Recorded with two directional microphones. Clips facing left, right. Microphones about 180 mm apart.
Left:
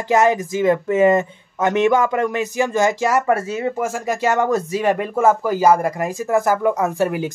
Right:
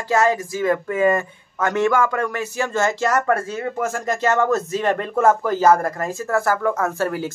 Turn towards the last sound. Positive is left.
turn(degrees=15)  # may be behind; listen again after turning